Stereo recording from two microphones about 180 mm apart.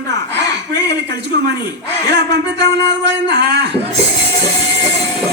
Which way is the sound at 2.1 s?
70° right (ahead or behind).